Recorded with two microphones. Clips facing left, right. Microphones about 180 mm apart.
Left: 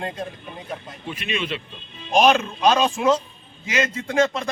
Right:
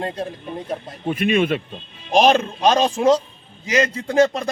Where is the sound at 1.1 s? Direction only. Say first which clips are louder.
Right 10 dB; 50° right (ahead or behind).